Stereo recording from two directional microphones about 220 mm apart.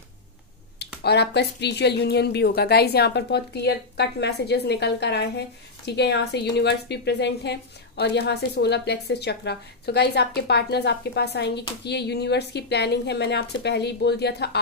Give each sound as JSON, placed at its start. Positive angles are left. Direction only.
{"t": 1.0, "sound": "a woman's voice", "side_deg": 50}